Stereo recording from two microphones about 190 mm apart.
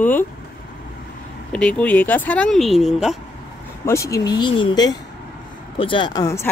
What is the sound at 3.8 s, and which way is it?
Speech, 15° left (ahead or behind).